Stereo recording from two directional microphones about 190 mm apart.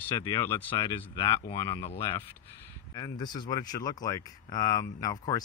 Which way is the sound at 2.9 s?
20° left (ahead or behind).